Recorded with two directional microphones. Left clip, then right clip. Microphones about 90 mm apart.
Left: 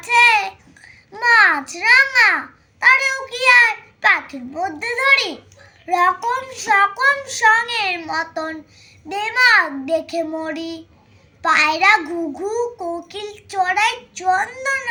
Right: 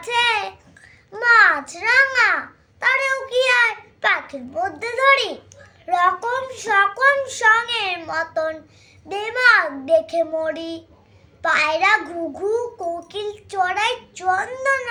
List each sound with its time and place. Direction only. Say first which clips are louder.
0.0 s babbling: left 6 dB; 35° right (ahead or behind)
2.8 s child singing: left 5 dB; 40° right (ahead or behind)